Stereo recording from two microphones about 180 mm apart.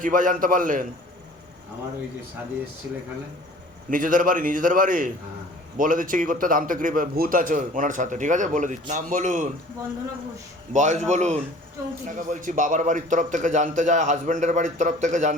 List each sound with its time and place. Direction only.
0.0 s a man's voice: 50° right (ahead or behind)
3.8 s a man's voice: 50° right (ahead or behind)
10.7 s a man's voice: 40° right (ahead or behind)